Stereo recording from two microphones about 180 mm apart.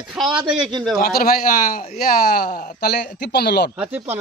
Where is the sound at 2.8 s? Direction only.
60° left (ahead or behind).